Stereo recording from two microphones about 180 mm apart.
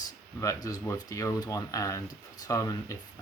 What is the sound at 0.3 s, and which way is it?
Speech, 20° left (ahead or behind).